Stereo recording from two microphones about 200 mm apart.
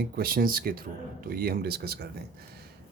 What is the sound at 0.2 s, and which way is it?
Speech, 45° right (ahead or behind).